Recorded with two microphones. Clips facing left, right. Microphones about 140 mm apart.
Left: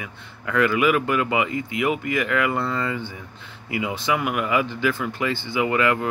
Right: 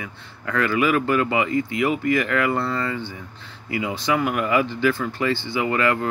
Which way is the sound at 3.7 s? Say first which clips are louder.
Right 1 dB; 15° left (ahead or behind).